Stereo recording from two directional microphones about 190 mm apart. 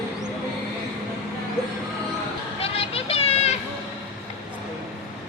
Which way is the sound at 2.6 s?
30° left (ahead or behind).